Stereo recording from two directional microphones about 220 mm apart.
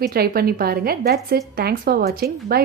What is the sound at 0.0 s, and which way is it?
A woman's voice, 45° right (ahead or behind).